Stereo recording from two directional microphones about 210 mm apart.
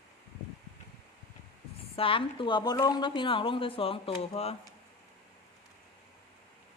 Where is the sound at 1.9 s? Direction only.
25° left (ahead or behind).